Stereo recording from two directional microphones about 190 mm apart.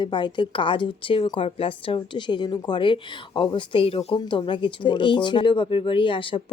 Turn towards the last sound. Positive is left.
turn(degrees=25)  # may be behind; listen again after turning